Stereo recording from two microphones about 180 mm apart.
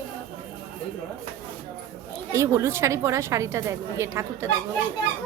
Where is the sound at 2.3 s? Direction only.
15° right (ahead or behind).